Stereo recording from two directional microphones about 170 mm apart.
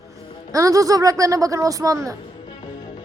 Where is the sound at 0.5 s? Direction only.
20° right (ahead or behind).